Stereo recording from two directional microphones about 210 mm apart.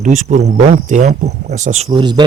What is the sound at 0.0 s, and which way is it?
Speech, 35° right (ahead or behind).